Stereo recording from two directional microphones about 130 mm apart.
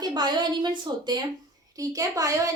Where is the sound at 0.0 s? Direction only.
35° right (ahead or behind).